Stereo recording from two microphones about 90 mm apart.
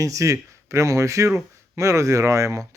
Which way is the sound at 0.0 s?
40° right (ahead or behind).